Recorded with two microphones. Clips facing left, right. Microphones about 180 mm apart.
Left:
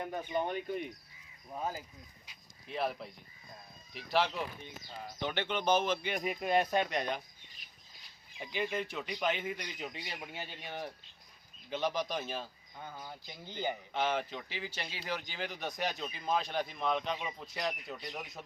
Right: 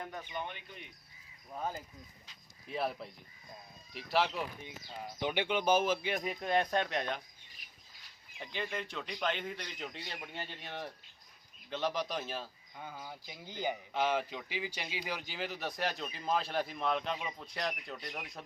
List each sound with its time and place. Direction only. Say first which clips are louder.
0.3 s speech: left 9 dB; 40° left (ahead or behind)
1.5 s a man's voice: left 1 dB; 10° left (ahead or behind)
2.6 s speech: left 1 dB; centre (ahead or behind)
4.6 s speech: right 1 dB; 15° right (ahead or behind)
8.4 s a man's voice: left 4 dB; 10° left (ahead or behind)